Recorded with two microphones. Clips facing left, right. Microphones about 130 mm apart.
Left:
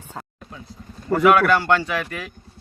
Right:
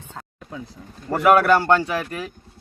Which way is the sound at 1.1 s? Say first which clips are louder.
Even; 35° right (ahead or behind).